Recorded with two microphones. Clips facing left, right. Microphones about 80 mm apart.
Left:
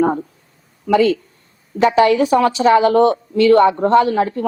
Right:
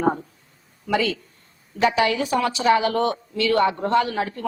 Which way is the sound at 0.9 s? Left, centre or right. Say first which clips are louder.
Left 9 dB; left.